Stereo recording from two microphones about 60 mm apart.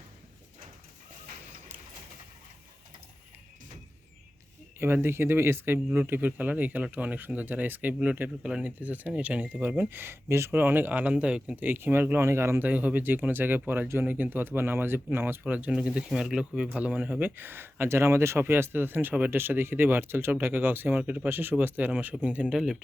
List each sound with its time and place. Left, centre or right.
4.8 s speech: right
10.0 s speech: right
10.5 s speech: right
11.6 s speech: right
12.6 s speech: right
15.5 s speech: right
16.6 s speech: right
22.5 s a man's voice: centre